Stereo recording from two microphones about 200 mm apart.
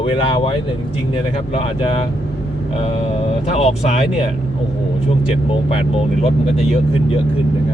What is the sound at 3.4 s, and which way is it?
Speech, 30° left (ahead or behind).